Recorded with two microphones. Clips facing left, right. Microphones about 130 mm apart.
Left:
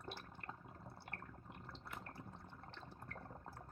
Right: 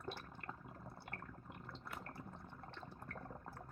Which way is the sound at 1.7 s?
50° right (ahead or behind).